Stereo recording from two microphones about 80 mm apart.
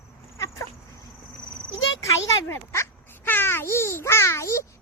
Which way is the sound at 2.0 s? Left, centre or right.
Left.